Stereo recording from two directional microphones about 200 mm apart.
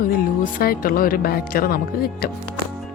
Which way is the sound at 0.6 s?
45° left (ahead or behind).